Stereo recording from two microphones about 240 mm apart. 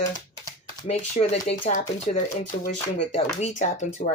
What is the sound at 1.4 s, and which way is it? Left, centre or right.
Speech, left.